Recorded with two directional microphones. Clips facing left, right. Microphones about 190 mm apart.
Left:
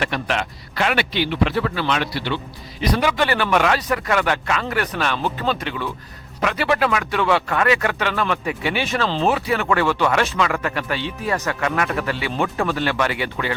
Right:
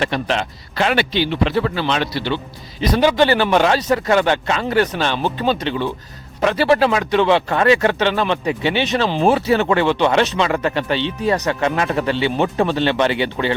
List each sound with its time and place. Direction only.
0.0 s speech: 30° right (ahead or behind)
9.2 s speech: 30° right (ahead or behind)